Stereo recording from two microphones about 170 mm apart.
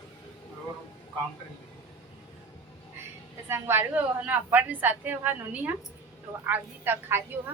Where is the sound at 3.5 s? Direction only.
15° right (ahead or behind).